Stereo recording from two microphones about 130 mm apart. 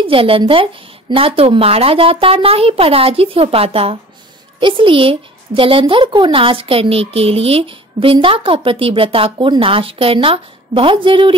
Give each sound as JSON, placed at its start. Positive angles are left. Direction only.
{"t": 0.0, "sound": "a woman's voice", "side_deg": -45}